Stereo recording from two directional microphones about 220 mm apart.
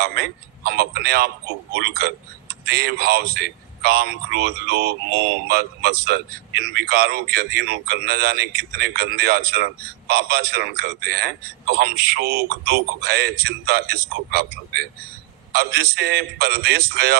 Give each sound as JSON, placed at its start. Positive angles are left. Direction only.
{"t": 0.0, "sound": "speech", "side_deg": -45}